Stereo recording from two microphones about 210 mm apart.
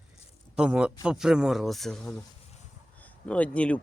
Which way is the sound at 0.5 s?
5° right (ahead or behind).